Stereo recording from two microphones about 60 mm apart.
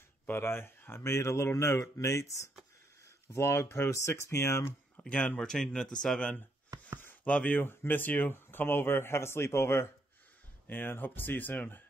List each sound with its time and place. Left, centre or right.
0.3 s speech: left
3.3 s speech: left
5.0 s speech: centre
6.7 s chopping: right
7.2 s speech: left
7.6 s a man's voice: left
10.7 s a man's voice: left